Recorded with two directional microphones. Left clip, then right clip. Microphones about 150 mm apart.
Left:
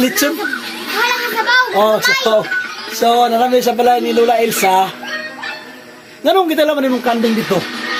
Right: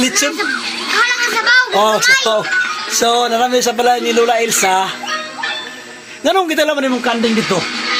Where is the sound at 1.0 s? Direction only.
15° left (ahead or behind).